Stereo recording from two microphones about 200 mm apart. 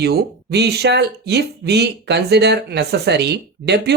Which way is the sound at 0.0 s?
55° right (ahead or behind).